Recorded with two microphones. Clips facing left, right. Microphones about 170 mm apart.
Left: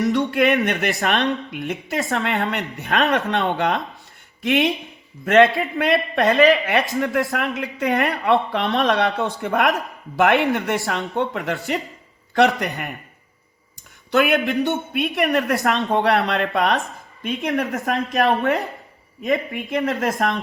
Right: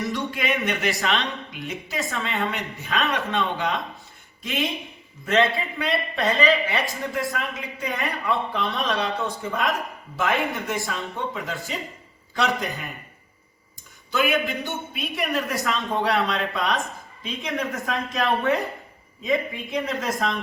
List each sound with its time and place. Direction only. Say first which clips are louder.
0.0 s a man's voice: left 9 dB; 65° left (ahead or behind)
14.1 s a man's voice: left 5 dB; 65° left (ahead or behind)
19.5 s speech: left 5 dB; 70° left (ahead or behind)